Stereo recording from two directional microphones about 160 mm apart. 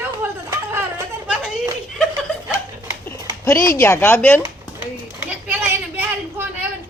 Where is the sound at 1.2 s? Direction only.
10° right (ahead or behind).